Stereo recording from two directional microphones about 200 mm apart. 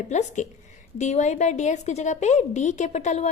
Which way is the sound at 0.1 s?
35° left (ahead or behind).